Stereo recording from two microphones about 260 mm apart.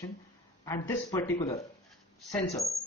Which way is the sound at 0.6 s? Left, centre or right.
Centre.